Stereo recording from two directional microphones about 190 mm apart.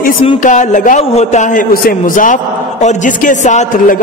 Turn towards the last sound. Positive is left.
turn(degrees=40)  # may be behind; listen again after turning